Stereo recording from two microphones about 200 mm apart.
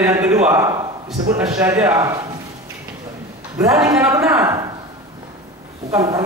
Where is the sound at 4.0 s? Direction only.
10° right (ahead or behind).